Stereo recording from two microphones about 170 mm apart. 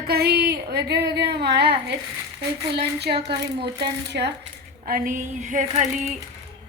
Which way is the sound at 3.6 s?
80° right.